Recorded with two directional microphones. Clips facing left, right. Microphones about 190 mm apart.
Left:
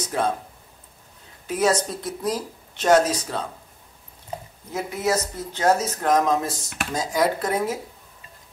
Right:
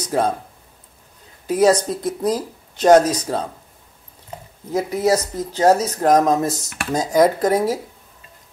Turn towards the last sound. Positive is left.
turn(degrees=-40)  # may be behind; listen again after turning